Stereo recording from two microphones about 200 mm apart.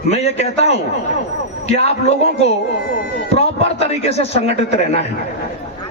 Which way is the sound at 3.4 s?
30° left (ahead or behind).